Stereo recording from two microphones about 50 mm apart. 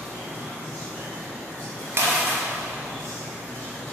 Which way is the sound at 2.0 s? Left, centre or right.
Right.